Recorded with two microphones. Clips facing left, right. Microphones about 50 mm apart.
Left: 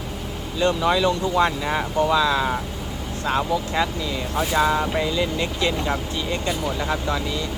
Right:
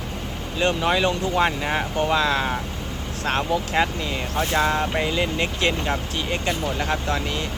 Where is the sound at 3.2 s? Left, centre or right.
Right.